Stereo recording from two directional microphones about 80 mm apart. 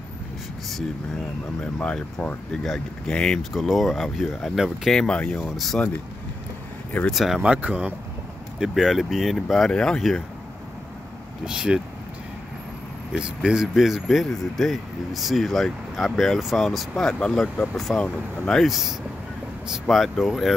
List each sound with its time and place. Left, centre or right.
1.6 s speech: centre
3.5 s speech: centre
5.0 s speech: centre
5.4 s speech: centre
7.1 s speech: centre
7.5 s speech: centre
8.5 s speech: centre
11.4 s speech: centre
13.2 s speech: centre